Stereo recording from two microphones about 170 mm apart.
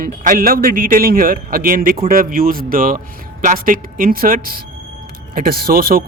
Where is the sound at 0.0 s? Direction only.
60° right (ahead or behind).